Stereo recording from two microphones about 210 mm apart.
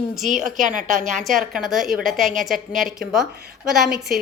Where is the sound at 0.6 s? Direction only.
40° right (ahead or behind).